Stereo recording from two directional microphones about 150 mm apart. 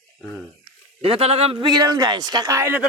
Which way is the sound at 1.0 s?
40° right (ahead or behind).